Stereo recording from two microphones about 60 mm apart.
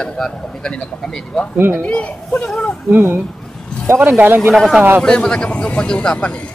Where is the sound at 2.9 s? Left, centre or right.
Right.